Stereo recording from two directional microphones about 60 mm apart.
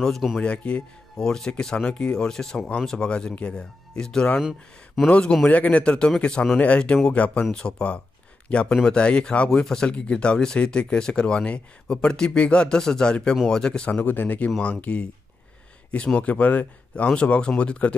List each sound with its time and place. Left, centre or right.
0.0 s speech: centre
0.4 s speech: centre
4.4 s speech: centre
5.0 s speech: centre
5.5 s speech: left
14.0 s speech: left
16.2 s speech: left